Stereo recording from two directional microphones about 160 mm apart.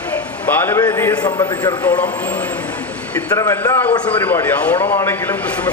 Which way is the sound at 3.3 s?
20° left (ahead or behind).